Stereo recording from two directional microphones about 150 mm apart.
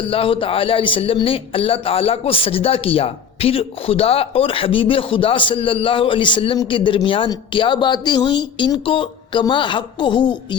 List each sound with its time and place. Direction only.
0.0 s a man's voice: 40° left (ahead or behind)